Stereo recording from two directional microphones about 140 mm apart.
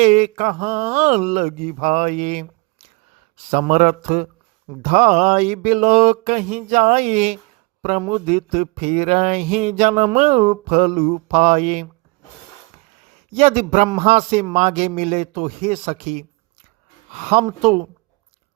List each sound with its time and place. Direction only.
0.0 s speech: 60° right (ahead or behind)
3.5 s speech: 55° right (ahead or behind)
13.3 s a man's voice: 50° right (ahead or behind)
17.3 s a man's voice: 50° right (ahead or behind)